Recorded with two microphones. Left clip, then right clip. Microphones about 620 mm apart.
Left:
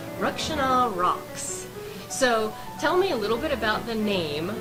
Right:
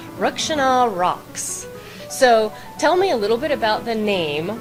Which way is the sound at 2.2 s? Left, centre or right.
Right.